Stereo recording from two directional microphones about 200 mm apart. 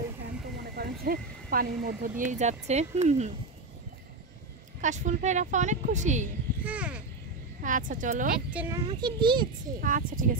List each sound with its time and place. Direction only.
0.7 s speech: 45° right (ahead or behind)
4.8 s speech: 35° right (ahead or behind)
6.6 s speech: 5° right (ahead or behind)
7.6 s speech: 40° right (ahead or behind)
8.5 s speech: 5° right (ahead or behind)
8.7 s a child's voice: 20° right (ahead or behind)
9.8 s speech: 45° right (ahead or behind)